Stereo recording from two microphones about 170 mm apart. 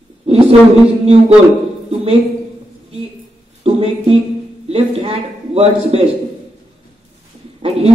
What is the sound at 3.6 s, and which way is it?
A woman's voice, 35° right (ahead or behind).